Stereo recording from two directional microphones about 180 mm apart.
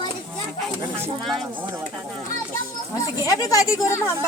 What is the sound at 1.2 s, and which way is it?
Speech, centre (ahead or behind).